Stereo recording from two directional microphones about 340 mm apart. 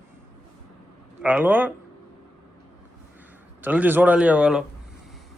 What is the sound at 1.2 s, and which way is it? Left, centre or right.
Speech, centre.